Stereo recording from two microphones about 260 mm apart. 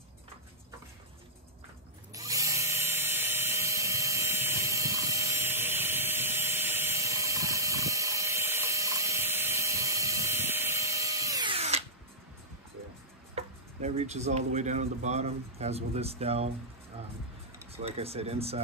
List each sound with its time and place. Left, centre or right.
2.1 s drill: centre
13.3 s speech: right
17.8 s speech: right